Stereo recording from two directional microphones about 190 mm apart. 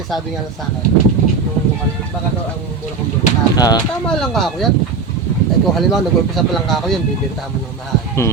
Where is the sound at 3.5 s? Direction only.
20° left (ahead or behind).